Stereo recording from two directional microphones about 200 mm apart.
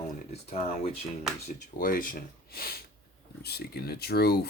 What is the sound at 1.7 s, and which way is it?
Speech, 45° left (ahead or behind).